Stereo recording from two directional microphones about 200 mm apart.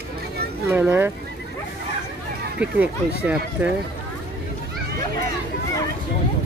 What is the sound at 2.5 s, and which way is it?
Speech, 5° right (ahead or behind).